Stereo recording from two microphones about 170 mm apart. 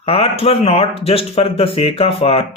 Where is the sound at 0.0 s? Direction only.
35° left (ahead or behind).